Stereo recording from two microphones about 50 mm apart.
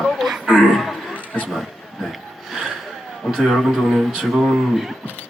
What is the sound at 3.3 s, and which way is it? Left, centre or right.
Speech, centre.